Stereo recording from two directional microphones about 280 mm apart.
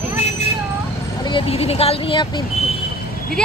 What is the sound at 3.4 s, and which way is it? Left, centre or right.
Speech, centre.